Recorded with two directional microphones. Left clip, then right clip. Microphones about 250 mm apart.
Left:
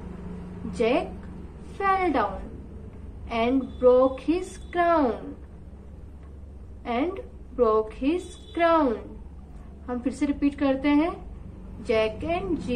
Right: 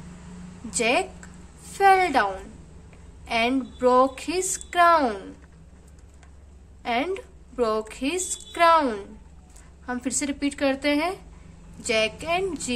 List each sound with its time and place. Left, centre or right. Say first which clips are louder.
0.7 s a woman's voice: right 1 dB; right
3.3 s a woman's voice: right 1 dB; right
6.8 s a woman's voice: right 2 dB; right